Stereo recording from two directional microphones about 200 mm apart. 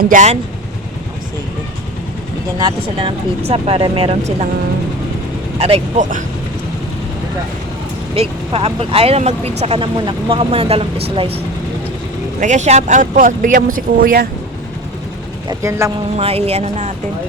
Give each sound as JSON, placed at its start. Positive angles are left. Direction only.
{"t": 0.0, "sound": "speech", "side_deg": -40}
{"t": 2.6, "sound": "speech", "side_deg": -25}
{"t": 5.5, "sound": "speech", "side_deg": -30}
{"t": 8.1, "sound": "speech", "side_deg": -30}
{"t": 12.4, "sound": "speech", "side_deg": -35}
{"t": 15.4, "sound": "speech", "side_deg": -15}
{"t": 16.1, "sound": "speech", "side_deg": -30}